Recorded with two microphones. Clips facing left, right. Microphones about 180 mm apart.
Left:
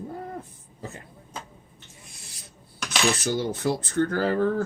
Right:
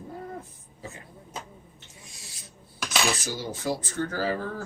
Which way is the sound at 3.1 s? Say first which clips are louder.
Left 7 dB; 60° left (ahead or behind).